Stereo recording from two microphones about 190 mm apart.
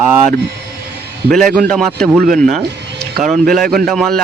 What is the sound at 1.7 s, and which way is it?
Speech, 5° left (ahead or behind).